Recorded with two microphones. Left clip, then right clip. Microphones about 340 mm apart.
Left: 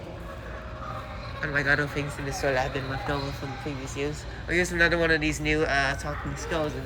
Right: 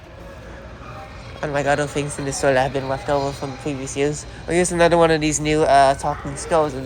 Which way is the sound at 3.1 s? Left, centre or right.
Centre.